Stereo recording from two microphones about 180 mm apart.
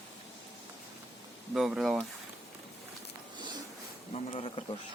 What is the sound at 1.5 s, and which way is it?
Speech, 5° right (ahead or behind).